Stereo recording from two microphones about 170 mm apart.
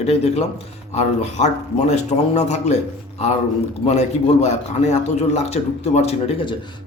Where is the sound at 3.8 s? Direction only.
40° left (ahead or behind).